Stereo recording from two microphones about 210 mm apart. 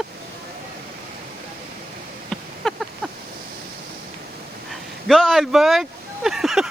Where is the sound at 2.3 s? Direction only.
Centre (ahead or behind).